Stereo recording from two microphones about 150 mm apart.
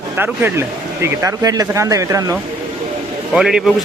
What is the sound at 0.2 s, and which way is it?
A man's voice, 15° right (ahead or behind).